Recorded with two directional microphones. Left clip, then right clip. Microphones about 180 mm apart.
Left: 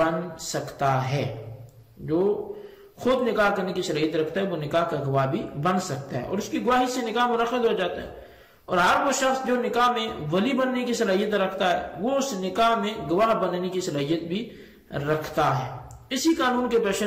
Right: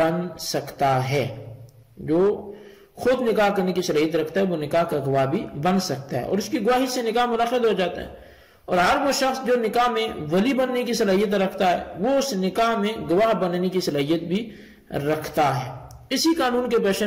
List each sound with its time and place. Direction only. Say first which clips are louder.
0.0 s a man's voice: right 2 dB; 40° right (ahead or behind)
3.0 s a man's voice: right 2 dB; 40° right (ahead or behind)